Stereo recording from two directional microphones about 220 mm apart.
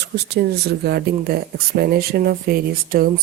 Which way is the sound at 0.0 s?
50° right (ahead or behind).